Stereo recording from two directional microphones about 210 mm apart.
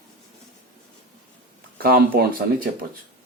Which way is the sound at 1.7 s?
45° right (ahead or behind).